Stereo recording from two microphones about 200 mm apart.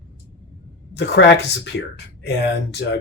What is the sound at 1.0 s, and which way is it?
Speech, 60° left (ahead or behind).